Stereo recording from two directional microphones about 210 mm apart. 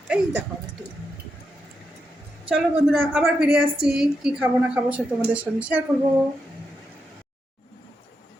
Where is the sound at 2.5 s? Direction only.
Centre (ahead or behind).